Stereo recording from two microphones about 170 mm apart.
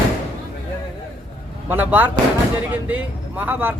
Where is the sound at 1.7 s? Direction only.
10° right (ahead or behind).